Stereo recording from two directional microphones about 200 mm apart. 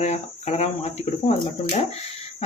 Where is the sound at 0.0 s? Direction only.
35° left (ahead or behind).